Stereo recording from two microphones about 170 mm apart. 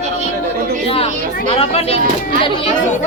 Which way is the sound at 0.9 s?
35° left (ahead or behind).